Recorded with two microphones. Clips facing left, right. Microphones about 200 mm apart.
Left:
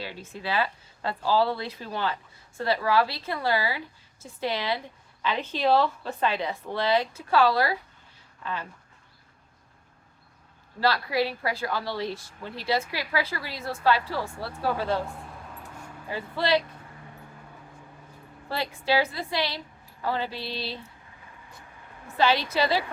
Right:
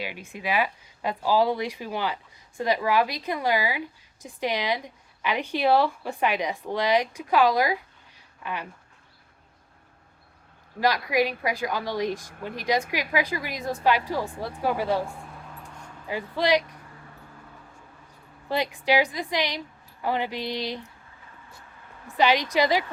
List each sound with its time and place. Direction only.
0.0 s speech: 15° right (ahead or behind)
10.8 s speech: 15° right (ahead or behind)
16.0 s speech: 15° right (ahead or behind)
18.4 s speech: 15° right (ahead or behind)
22.2 s speech: 15° right (ahead or behind)